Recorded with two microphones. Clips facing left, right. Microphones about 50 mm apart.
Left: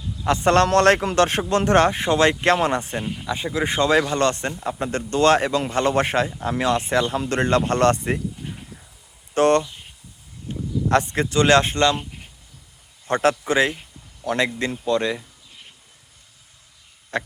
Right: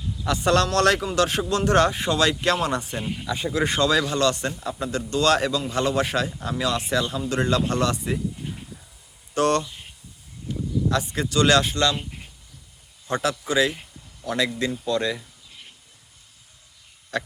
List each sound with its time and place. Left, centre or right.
0.3 s speech: left
3.0 s speech: centre
3.8 s speech: left
9.3 s speech: left
10.5 s speech: left
13.1 s a man's voice: left
17.1 s speech: left